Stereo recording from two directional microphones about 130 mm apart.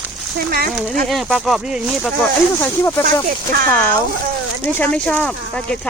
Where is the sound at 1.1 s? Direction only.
Centre (ahead or behind).